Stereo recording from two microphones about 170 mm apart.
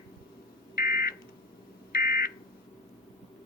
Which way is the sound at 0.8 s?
60° left (ahead or behind).